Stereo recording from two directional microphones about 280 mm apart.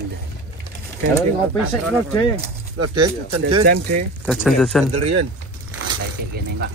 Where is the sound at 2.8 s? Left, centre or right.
Right.